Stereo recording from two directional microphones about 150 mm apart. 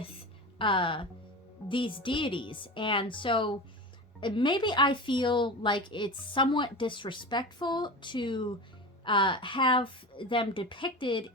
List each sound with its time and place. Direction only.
0.6 s a woman's voice: 35° left (ahead or behind)